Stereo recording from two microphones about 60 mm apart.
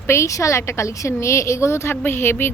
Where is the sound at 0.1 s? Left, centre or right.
Left.